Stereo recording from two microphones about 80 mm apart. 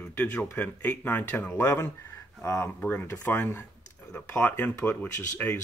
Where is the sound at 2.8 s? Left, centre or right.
Centre.